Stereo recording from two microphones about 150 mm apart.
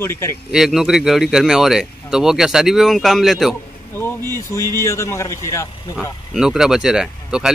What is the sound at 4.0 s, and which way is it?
A man's voice, 15° left (ahead or behind).